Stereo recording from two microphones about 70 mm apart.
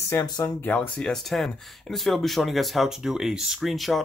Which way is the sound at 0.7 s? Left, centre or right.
Centre.